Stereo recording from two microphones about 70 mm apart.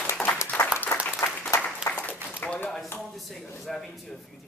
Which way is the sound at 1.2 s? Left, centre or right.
Left.